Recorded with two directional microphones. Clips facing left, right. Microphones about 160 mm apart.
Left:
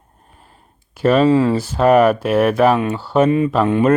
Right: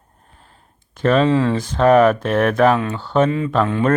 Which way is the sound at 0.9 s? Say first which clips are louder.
Left 2 dB; 10° left (ahead or behind).